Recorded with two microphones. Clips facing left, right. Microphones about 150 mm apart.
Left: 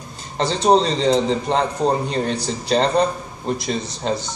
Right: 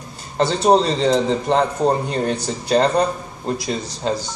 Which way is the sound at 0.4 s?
5° right (ahead or behind).